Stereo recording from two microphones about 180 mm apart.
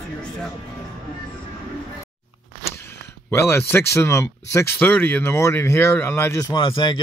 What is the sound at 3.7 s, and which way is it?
Speech, 15° left (ahead or behind).